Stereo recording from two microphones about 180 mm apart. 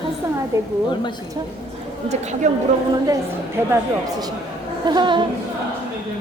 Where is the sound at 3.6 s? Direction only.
15° right (ahead or behind).